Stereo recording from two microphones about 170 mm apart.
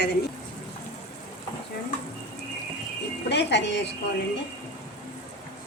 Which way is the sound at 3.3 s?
90° left.